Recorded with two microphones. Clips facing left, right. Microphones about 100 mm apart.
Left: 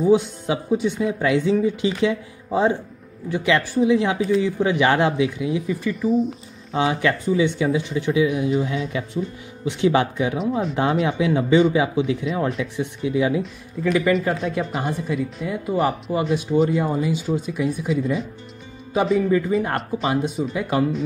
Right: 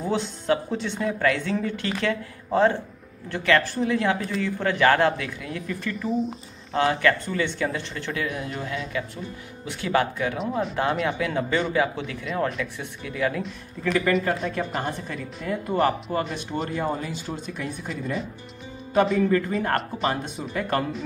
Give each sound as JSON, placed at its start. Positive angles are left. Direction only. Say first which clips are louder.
{"t": 0.0, "sound": "speech", "louder": "left 9 dB", "side_deg": 10}
{"t": 5.9, "sound": "speech", "louder": "left 5 dB", "side_deg": 5}
{"t": 6.8, "sound": "speech", "louder": "left 1 dB", "side_deg": 15}
{"t": 10.4, "sound": "speech", "louder": "left 4 dB", "side_deg": 0}
{"t": 11.1, "sound": "speech", "louder": "left 6 dB", "side_deg": 20}
{"t": 14.4, "sound": "speech", "louder": "left 3 dB", "side_deg": 0}